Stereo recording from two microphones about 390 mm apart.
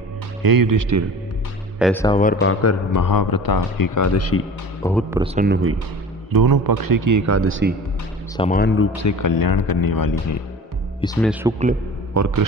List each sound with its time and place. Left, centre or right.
0.4 s a man's voice: right
1.8 s speech: centre
2.4 s a man's voice: left
5.1 s a man's voice: centre
6.3 s a man's voice: right
8.4 s speech: left
8.9 s speech: left
11.0 s speech: centre
12.1 s a man's voice: right